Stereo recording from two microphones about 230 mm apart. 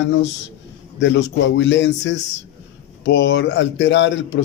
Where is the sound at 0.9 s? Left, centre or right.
Left.